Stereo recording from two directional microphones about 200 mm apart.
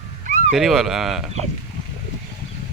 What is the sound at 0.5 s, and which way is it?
Speech, centre (ahead or behind).